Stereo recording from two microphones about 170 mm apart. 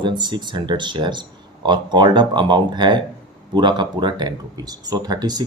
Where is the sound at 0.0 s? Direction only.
25° right (ahead or behind).